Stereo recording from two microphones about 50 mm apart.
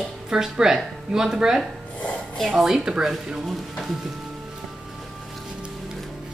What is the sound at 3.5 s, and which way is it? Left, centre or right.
Music, centre.